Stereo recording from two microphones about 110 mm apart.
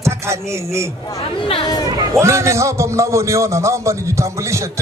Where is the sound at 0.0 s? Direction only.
25° right (ahead or behind).